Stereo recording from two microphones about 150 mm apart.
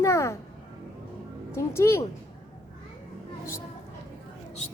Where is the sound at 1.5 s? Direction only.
20° left (ahead or behind).